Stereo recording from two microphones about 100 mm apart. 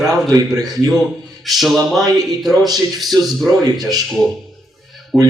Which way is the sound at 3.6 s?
40° right (ahead or behind).